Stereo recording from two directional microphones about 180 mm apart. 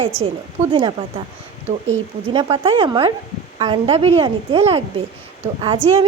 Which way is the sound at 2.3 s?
30° right (ahead or behind).